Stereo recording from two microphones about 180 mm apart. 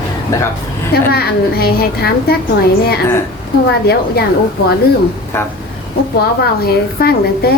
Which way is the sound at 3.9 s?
60° left (ahead or behind).